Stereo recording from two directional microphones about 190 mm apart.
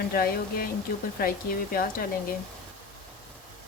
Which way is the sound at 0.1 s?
50° left (ahead or behind).